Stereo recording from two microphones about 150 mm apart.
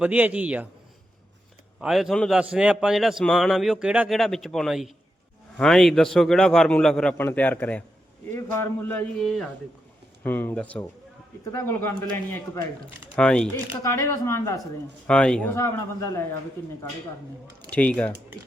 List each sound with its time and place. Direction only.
0.0 s a man's voice: 10° right (ahead or behind)
1.8 s a man's voice: centre (ahead or behind); by 9.0 s 15° left (ahead or behind)
9.1 s a man's voice: centre (ahead or behind)
10.2 s a man's voice: 10° left (ahead or behind)
13.8 s speech: 20° left (ahead or behind)
15.0 s a man's voice: 5° left (ahead or behind)
15.5 s speech: 20° left (ahead or behind)
17.7 s speech: 10° left (ahead or behind)